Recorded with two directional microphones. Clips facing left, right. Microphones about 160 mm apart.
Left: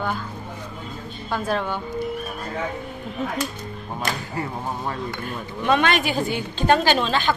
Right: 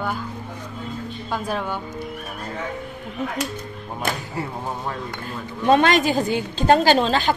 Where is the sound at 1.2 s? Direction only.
10° right (ahead or behind).